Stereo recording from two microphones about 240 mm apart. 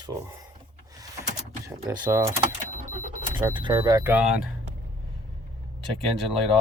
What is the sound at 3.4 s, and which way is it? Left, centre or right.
A man's voice, centre.